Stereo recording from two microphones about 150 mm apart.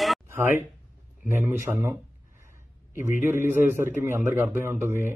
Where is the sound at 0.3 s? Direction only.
15° right (ahead or behind).